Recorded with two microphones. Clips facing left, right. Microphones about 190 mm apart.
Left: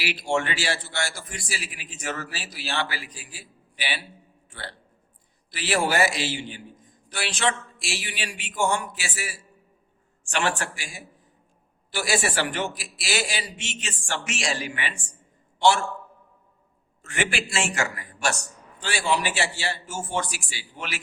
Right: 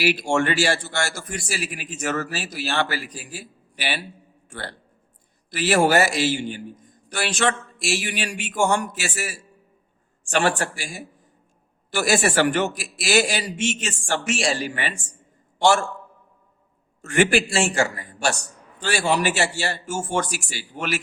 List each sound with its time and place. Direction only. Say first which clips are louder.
0.0 s a man's voice: right 5 dB; 45° right (ahead or behind)
4.4 s music: right 5 dB; 45° right (ahead or behind)
5.5 s a man's voice: right 6 dB; 45° right (ahead or behind)
17.0 s a man's voice: right 9 dB; 45° right (ahead or behind)
18.8 s a man's voice: right 4 dB; 45° right (ahead or behind)